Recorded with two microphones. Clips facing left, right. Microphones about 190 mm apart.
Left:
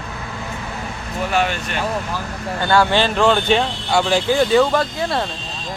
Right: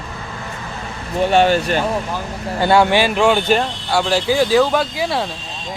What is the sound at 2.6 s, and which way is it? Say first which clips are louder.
Speech: right 3 dB; 20° right (ahead or behind).